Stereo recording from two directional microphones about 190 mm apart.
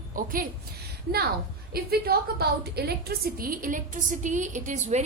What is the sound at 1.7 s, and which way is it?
A woman's voice, 55° right (ahead or behind).